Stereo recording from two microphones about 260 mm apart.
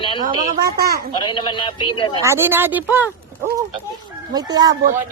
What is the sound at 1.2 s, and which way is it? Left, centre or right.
Speech, centre.